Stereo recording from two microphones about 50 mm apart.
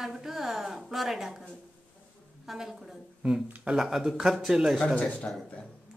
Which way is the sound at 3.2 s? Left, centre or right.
Centre.